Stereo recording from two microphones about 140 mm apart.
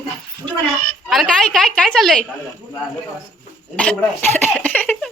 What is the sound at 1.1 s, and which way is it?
A woman's voice, 5° left (ahead or behind).